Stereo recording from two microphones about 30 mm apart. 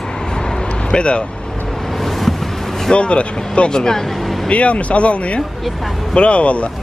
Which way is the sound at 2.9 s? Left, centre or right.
Left.